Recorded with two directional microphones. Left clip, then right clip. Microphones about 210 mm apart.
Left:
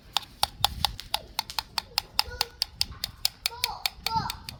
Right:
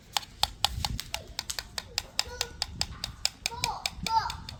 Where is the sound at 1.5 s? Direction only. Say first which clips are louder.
Left 6 dB; 35° left (ahead or behind).